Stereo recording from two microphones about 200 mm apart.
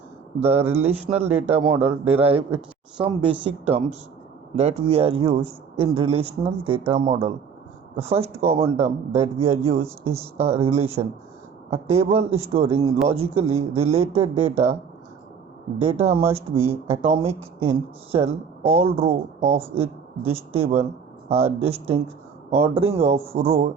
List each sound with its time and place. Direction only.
0.3 s speech: 30° right (ahead or behind)
1.3 s speech: 10° right (ahead or behind)
1.5 s speech: 30° right (ahead or behind)
15.8 s speech: 30° right (ahead or behind)